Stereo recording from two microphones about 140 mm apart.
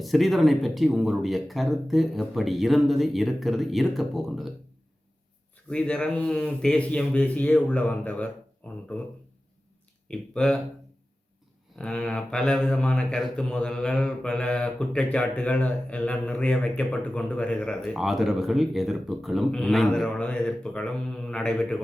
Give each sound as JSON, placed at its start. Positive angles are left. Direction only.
{"t": 0.0, "sound": "speech", "side_deg": 0}
{"t": 5.6, "sound": "speech", "side_deg": 5}
{"t": 10.1, "sound": "speech", "side_deg": 5}
{"t": 11.8, "sound": "speech", "side_deg": 5}